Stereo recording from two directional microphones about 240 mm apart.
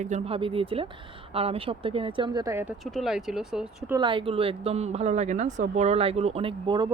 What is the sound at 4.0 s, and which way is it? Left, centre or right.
Speech, right.